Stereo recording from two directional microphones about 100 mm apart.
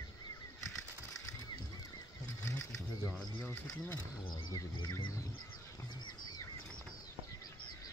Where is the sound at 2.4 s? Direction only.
35° left (ahead or behind).